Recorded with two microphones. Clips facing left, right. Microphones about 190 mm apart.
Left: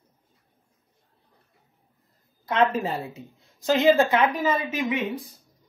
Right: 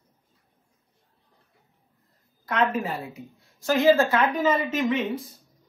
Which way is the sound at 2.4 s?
25° left (ahead or behind).